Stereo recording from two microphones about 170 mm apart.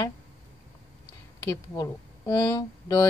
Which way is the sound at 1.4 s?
20° left (ahead or behind).